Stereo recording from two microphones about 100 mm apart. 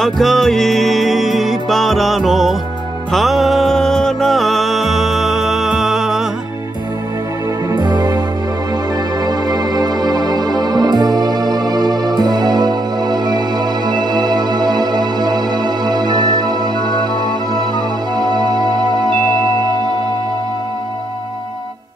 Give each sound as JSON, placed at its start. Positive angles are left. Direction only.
{"t": 0.0, "sound": "music", "side_deg": 0}
{"t": 7.7, "sound": "music", "side_deg": -45}
{"t": 9.2, "sound": "music", "side_deg": -40}
{"t": 18.1, "sound": "music", "side_deg": -45}